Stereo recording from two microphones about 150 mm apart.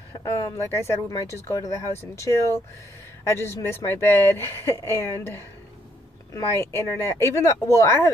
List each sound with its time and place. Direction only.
0.2 s a woman's voice: 20° left (ahead or behind)